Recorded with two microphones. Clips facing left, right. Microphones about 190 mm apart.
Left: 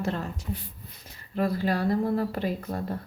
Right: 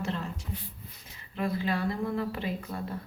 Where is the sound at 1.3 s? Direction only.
40° left (ahead or behind).